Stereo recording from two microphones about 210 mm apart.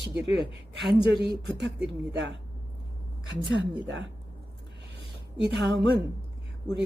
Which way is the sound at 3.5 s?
60° right (ahead or behind).